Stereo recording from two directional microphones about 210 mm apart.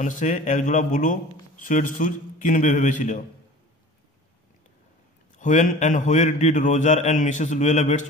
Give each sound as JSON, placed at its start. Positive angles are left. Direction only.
{"t": 0.0, "sound": "a man's voice", "side_deg": 35}
{"t": 5.4, "sound": "a man's voice", "side_deg": 35}